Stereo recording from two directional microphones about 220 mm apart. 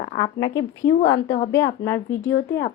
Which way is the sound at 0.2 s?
15° left (ahead or behind).